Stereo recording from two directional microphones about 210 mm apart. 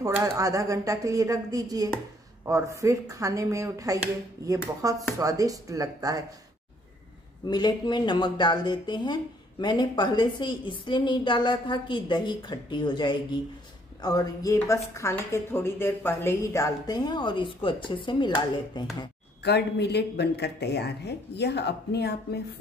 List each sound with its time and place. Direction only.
0.0 s speech: 15° right (ahead or behind)
7.4 s speech: 20° left (ahead or behind)
19.4 s speech: 55° left (ahead or behind)